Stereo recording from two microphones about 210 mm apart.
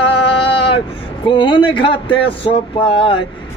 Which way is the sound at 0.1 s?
25° left (ahead or behind).